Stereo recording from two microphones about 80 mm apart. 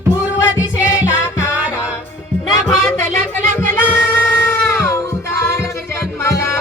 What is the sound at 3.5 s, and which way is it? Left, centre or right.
Music, left.